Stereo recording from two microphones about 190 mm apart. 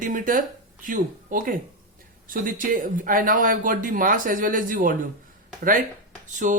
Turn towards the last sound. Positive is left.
turn(degrees=-40)  # may be behind; listen again after turning